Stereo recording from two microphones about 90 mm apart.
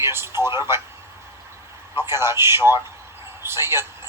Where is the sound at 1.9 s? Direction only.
30° right (ahead or behind).